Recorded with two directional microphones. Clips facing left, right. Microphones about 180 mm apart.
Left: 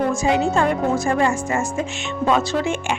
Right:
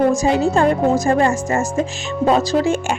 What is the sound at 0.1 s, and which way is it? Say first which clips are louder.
Speech: right 3 dB; 35° right (ahead or behind).